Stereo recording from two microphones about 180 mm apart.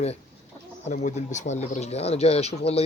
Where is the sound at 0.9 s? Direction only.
40° left (ahead or behind).